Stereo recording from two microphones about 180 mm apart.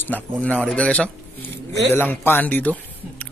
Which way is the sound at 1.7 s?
75° right (ahead or behind).